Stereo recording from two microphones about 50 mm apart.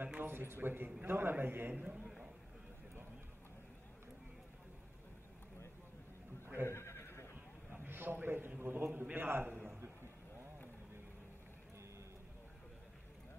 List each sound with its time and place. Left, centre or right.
0.2 s a man's voice: right
1.7 s a man's voice: right
6.6 s neigh: left
7.7 s a sound: right
9.1 s a man's voice: right